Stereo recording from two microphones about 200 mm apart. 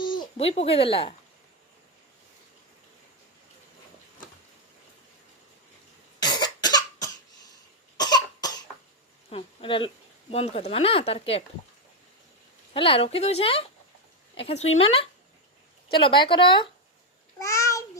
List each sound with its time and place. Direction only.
0.0 s speech: 25° left (ahead or behind)
6.2 s cough: 20° left (ahead or behind)
9.3 s a sound: 25° left (ahead or behind)
10.3 s speech: 30° left (ahead or behind)
12.7 s speech: 25° left (ahead or behind)
17.4 s a sound: 15° left (ahead or behind)